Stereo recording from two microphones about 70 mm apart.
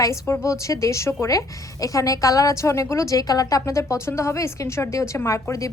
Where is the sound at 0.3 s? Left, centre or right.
Left.